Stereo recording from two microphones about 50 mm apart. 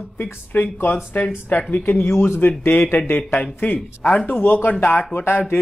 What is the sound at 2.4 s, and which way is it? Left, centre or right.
Speech, left.